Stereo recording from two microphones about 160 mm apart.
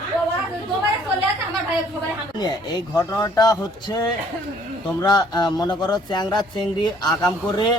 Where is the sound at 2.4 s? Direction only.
25° left (ahead or behind).